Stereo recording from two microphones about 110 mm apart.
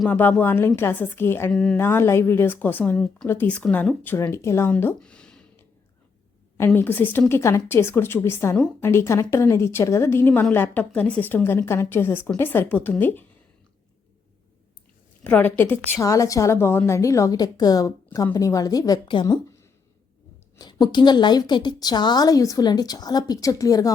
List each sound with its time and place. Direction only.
0.1 s a woman's voice: 15° left (ahead or behind)
4.9 s a sound: 10° left (ahead or behind)
6.7 s a woman's voice: 15° left (ahead or behind)
15.2 s a woman's voice: 15° left (ahead or behind)
16.0 s a woman's voice: 30° left (ahead or behind)
19.0 s speech: 45° left (ahead or behind)
20.6 s a woman's voice: 40° left (ahead or behind)